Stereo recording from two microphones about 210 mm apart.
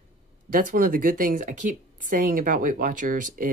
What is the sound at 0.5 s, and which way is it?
Speech, 40° right (ahead or behind).